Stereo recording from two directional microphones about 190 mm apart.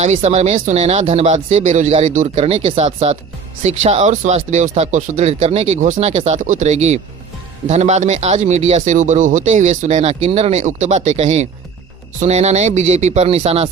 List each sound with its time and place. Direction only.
0.0 s speech: 35° right (ahead or behind)